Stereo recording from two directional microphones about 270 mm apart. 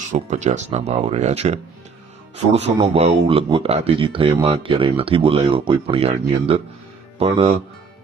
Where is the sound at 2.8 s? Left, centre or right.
Right.